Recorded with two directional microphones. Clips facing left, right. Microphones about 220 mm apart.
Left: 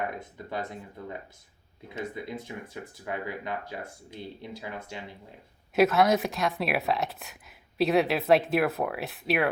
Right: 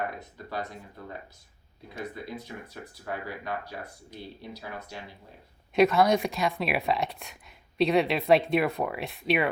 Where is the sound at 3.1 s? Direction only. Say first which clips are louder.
Left 1 dB; 20° left (ahead or behind).